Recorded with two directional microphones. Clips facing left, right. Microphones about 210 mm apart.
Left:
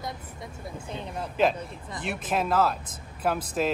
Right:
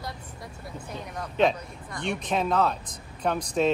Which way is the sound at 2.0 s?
5° left (ahead or behind).